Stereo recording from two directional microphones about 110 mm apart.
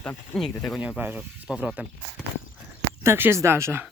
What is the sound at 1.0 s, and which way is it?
Speech, 15° right (ahead or behind).